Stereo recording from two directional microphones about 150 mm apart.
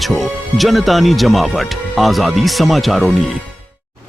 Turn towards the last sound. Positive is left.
turn(degrees=0)  # may be behind; listen again after turning